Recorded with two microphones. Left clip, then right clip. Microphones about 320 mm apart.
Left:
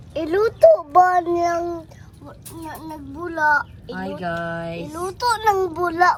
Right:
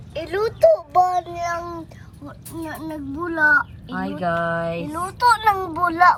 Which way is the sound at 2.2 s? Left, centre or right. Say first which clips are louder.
Right 3 dB; centre.